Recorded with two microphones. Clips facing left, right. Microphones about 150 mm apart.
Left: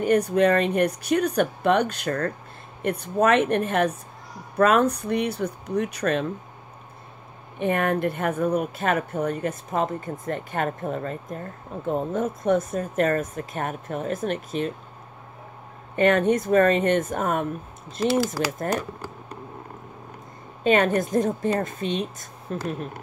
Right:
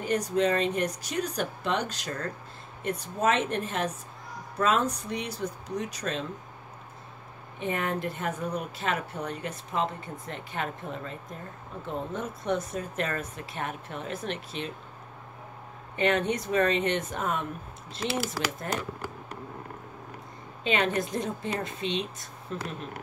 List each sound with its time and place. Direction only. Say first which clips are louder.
0.0 s speech: left 7 dB; 55° left (ahead or behind)
7.5 s a woman's voice: left 7 dB; 60° left (ahead or behind)
16.0 s a woman's voice: left 7 dB; 50° left (ahead or behind)
20.6 s a woman's voice: left 7 dB; 50° left (ahead or behind)